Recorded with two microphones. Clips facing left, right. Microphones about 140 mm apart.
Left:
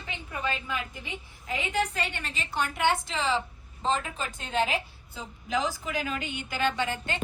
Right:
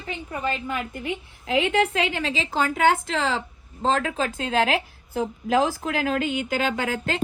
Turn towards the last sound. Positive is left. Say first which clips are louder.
# right 5 dB
turn(degrees=-90)